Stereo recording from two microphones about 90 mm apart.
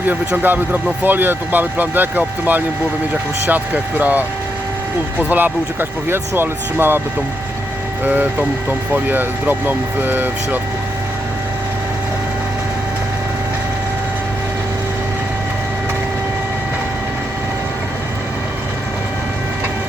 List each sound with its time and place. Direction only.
0.1 s speech: 20° right (ahead or behind)
5.3 s speech: 20° right (ahead or behind)
8.0 s speech: 20° right (ahead or behind)